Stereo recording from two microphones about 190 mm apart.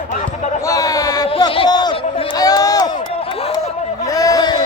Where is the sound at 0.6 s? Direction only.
20° left (ahead or behind).